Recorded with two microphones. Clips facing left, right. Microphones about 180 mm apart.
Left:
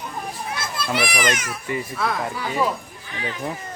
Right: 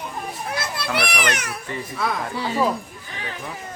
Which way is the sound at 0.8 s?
65° right (ahead or behind).